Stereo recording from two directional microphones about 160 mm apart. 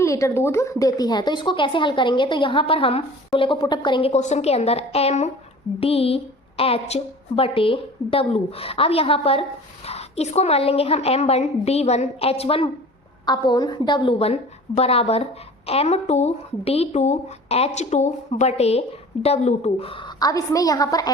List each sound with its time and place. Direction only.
0.0 s a woman's voice: 20° left (ahead or behind)
4.1 s a woman's voice: 45° left (ahead or behind)
13.2 s a woman's voice: 25° left (ahead or behind)